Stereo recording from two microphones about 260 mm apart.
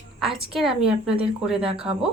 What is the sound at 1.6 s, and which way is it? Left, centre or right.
Speech, right.